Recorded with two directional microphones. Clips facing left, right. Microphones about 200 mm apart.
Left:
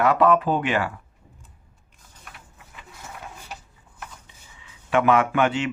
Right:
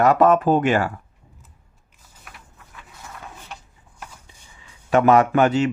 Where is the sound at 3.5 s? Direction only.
5° left (ahead or behind).